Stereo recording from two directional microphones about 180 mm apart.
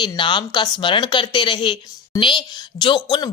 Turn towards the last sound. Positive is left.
turn(degrees=25)  # may be behind; listen again after turning